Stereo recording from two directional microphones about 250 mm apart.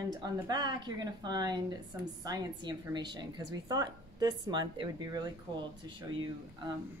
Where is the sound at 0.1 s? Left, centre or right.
Centre.